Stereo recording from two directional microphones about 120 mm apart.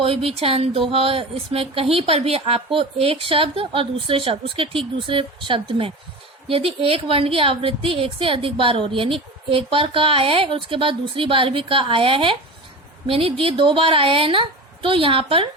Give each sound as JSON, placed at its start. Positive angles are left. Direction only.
{"t": 0.0, "sound": "speech", "side_deg": -50}